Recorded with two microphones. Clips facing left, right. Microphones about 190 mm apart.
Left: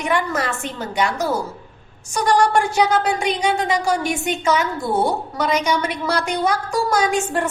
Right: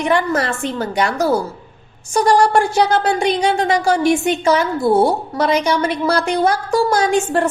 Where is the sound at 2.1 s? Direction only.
30° right (ahead or behind).